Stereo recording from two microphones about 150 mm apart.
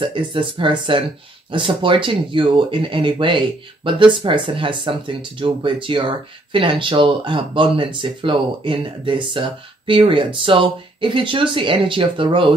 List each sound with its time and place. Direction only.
0.0 s speech: 35° right (ahead or behind)